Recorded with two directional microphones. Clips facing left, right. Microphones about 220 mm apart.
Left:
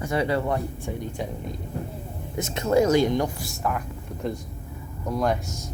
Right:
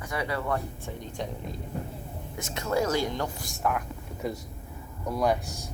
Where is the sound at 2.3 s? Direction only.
20° left (ahead or behind).